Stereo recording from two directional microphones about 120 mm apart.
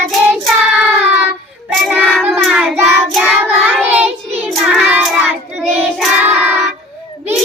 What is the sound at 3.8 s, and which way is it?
Child singing, 15° right (ahead or behind).